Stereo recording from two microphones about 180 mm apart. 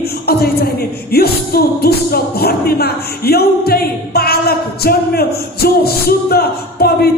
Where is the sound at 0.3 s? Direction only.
60° left (ahead or behind).